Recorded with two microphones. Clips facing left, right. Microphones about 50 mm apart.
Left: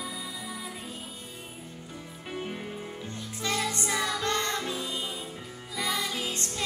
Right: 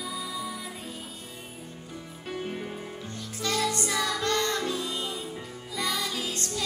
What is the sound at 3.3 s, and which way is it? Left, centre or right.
Music, left.